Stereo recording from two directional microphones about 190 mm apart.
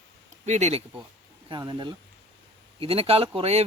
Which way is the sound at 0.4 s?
35° right (ahead or behind).